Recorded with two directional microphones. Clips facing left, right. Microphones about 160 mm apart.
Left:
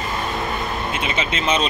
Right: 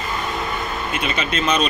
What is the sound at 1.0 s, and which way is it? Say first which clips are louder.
Speech: right 2 dB; 25° left (ahead or behind).